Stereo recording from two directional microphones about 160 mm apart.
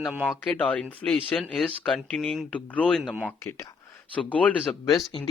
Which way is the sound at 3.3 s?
20° left (ahead or behind).